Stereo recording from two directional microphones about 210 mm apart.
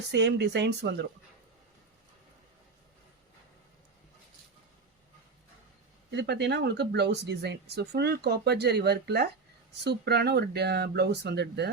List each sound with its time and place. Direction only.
0.1 s speech: 55° right (ahead or behind)
6.1 s speech: 55° right (ahead or behind)